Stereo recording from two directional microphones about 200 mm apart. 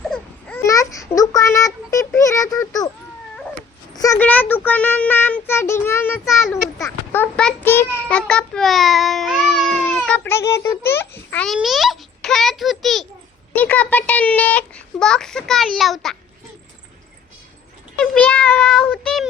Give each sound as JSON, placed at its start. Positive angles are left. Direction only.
{"t": 0.0, "sound": "babbling", "side_deg": 5}
{"t": 0.7, "sound": "child singing", "side_deg": 15}
{"t": 3.9, "sound": "a sound", "side_deg": 15}
{"t": 6.5, "sound": "child singing", "side_deg": 15}
{"t": 13.6, "sound": "a child's voice", "side_deg": 10}
{"t": 18.0, "sound": "speech", "side_deg": 5}